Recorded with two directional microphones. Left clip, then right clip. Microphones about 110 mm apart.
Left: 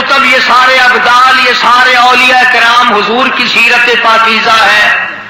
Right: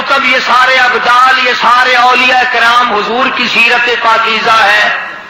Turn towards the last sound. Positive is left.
turn(degrees=20)  # may be behind; listen again after turning